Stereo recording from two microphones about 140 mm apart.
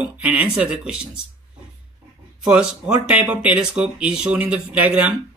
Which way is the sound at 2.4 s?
5° right (ahead or behind).